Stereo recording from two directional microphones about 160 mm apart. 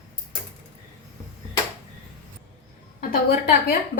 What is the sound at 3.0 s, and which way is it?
Speech, 65° left (ahead or behind).